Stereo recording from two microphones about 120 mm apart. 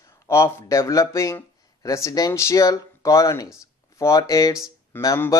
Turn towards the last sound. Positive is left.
turn(degrees=25)  # may be behind; listen again after turning